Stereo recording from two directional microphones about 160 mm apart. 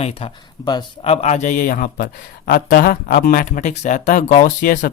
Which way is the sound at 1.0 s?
40° left (ahead or behind).